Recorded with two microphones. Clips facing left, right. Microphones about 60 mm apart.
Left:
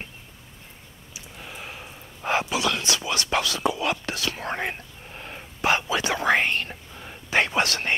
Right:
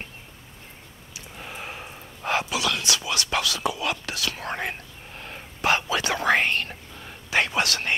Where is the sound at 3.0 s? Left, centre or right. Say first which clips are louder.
Left 1 dB; left.